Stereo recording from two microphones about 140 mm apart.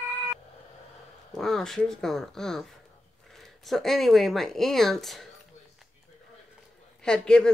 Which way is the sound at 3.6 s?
Centre (ahead or behind).